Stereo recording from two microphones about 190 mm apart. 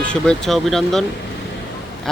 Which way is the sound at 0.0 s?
5° left (ahead or behind).